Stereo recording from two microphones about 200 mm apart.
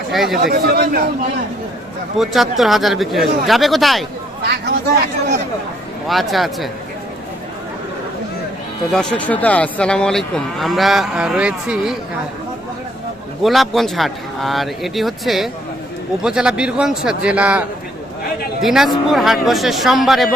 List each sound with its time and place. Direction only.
0.1 s speech: centre (ahead or behind)
0.4 s speech: 50° right (ahead or behind)
2.1 s speech: centre (ahead or behind)
4.4 s speech: 55° right (ahead or behind)
6.1 s speech: centre (ahead or behind)
8.9 s speech: 5° left (ahead or behind)
13.4 s speech: centre (ahead or behind)